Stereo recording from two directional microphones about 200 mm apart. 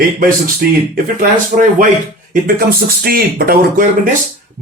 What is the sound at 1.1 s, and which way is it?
Speech, 45° right (ahead or behind).